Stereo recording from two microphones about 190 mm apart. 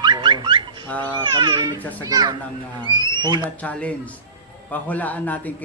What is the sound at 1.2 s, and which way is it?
Speech, 25° right (ahead or behind).